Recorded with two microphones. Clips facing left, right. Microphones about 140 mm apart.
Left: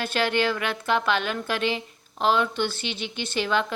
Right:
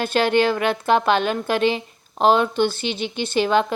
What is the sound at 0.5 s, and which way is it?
A woman's voice, 30° right (ahead or behind).